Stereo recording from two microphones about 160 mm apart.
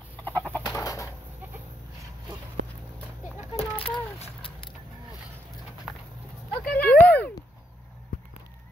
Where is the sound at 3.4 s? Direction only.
40° left (ahead or behind).